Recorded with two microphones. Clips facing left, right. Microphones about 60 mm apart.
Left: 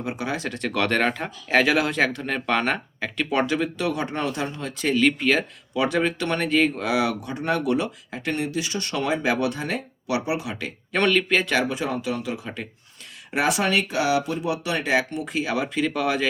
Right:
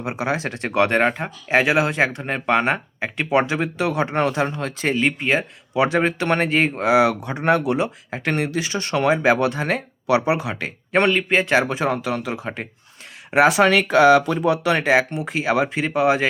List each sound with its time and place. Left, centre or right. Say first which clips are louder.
0.0 s speech: right 4 dB; centre
4.2 s speech: right 6 dB; right
4.9 s speech: left 2 dB; right
6.0 s speech: right 4 dB; right
8.1 s speech: right 2 dB; right
11.1 s speech: right 2 dB; centre
11.4 s speech: right 5 dB; right
13.6 s speech: right 8 dB; right